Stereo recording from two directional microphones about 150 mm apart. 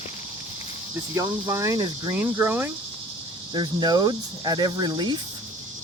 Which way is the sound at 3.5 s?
30° right (ahead or behind).